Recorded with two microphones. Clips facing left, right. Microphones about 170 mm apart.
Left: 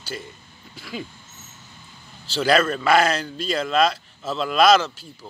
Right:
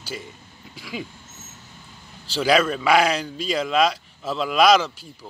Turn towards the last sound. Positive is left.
turn(degrees=-10)  # may be behind; listen again after turning